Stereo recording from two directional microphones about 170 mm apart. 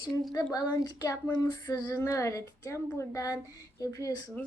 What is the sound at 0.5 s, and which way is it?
Speech, 20° left (ahead or behind).